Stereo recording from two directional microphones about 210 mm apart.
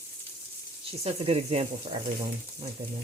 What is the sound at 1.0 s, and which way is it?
Speech, 30° right (ahead or behind).